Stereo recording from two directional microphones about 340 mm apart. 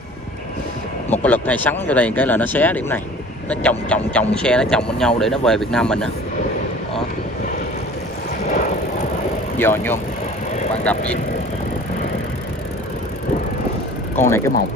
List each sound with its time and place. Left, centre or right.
1.2 s speech: centre
8.5 s vehicle: left
9.6 s speech: centre
14.2 s speech: centre